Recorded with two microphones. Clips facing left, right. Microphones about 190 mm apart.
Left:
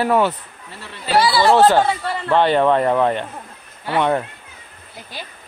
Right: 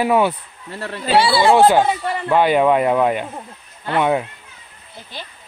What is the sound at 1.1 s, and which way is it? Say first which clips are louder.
Speech: right 1 dB; 30° right (ahead or behind).